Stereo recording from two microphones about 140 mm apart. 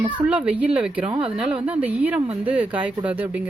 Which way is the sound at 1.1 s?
40° right (ahead or behind).